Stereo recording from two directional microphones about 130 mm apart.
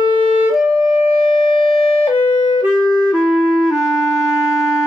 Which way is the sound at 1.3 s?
45° left (ahead or behind).